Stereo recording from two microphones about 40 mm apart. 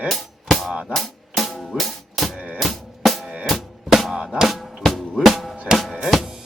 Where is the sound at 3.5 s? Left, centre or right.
Centre.